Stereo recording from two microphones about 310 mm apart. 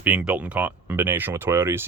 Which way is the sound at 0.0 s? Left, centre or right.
Centre.